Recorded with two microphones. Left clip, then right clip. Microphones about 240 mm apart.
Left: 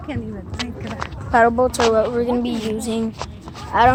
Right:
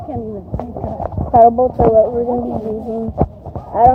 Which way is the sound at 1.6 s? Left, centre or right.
Centre.